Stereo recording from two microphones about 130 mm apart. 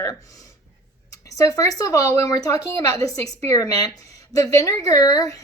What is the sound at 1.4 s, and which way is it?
A woman's voice, 25° left (ahead or behind).